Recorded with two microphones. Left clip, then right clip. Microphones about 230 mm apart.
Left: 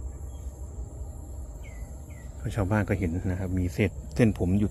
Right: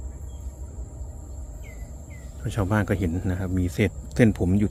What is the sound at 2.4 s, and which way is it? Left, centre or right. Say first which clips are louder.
Speech: right 3 dB; centre.